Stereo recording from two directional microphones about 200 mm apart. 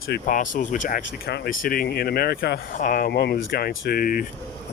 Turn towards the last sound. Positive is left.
turn(degrees=45)  # may be behind; listen again after turning